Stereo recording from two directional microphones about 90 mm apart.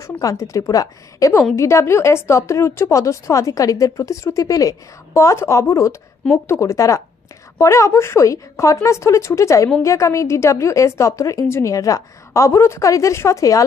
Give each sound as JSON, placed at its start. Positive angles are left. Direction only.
{"t": 0.0, "sound": "a woman's voice", "side_deg": 40}